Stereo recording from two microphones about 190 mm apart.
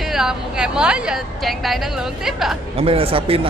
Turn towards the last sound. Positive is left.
turn(degrees=-30)  # may be behind; listen again after turning